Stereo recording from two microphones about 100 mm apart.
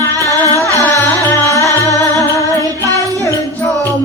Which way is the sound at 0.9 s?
30° left (ahead or behind).